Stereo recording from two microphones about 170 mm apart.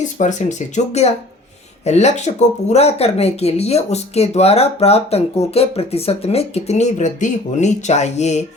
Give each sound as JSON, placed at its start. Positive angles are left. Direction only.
{"t": 0.0, "sound": "speech", "side_deg": 45}